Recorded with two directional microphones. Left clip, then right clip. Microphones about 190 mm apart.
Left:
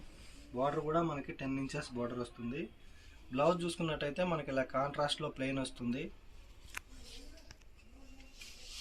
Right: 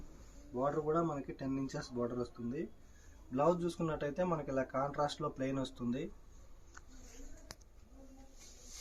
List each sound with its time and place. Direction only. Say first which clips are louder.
0.5 s speech: left 1 dB; 5° left (ahead or behind)
3.3 s speech: left 1 dB; 15° right (ahead or behind)